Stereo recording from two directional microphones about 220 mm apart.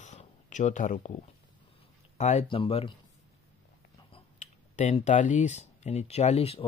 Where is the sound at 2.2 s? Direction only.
30° left (ahead or behind).